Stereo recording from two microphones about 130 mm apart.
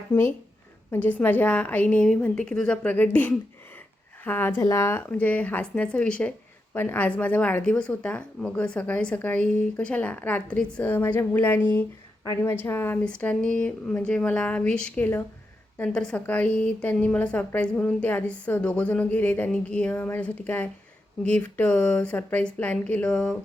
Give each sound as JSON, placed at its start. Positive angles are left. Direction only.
{"t": 0.9, "sound": "a woman's voice", "side_deg": 10}